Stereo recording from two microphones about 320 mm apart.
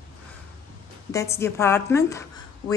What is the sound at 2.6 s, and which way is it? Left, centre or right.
Speech, left.